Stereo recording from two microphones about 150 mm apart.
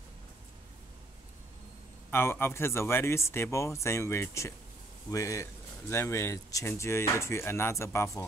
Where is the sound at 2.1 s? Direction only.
15° left (ahead or behind).